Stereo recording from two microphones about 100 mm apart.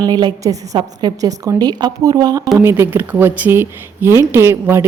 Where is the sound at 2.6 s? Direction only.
25° right (ahead or behind).